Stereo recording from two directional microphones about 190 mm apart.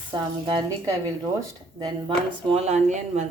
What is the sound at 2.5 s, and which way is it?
Speech, 35° right (ahead or behind).